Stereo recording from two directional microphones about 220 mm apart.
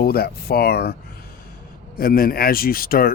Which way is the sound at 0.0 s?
45° left (ahead or behind).